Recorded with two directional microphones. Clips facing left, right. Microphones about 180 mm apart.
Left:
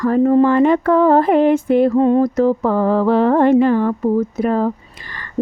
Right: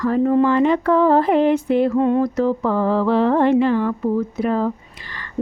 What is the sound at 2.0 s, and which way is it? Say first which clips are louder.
Speech: left 4 dB; 40° left (ahead or behind).